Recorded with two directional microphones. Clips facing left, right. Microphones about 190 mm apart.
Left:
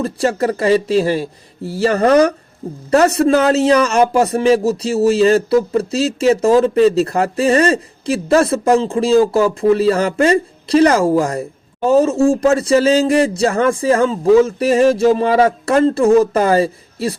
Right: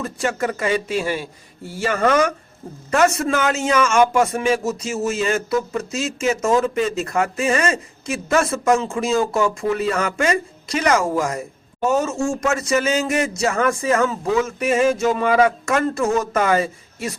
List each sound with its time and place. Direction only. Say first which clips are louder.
0.0 s a man's voice: left 6 dB; 35° left (ahead or behind)